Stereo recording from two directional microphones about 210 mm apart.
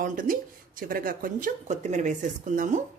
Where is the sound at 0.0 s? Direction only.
40° right (ahead or behind).